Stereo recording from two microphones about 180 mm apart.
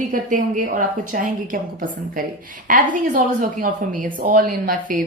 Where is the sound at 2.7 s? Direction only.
50° right (ahead or behind).